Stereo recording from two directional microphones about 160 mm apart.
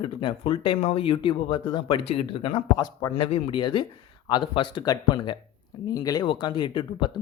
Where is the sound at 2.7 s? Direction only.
25° left (ahead or behind).